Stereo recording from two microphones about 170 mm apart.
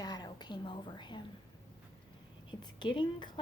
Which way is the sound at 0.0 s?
25° left (ahead or behind).